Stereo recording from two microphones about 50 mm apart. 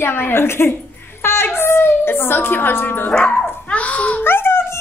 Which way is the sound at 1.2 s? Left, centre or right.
Left.